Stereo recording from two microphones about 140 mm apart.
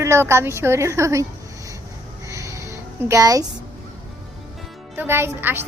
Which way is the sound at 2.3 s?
25° right (ahead or behind).